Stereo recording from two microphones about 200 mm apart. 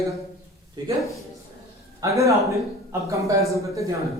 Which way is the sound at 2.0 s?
15° right (ahead or behind).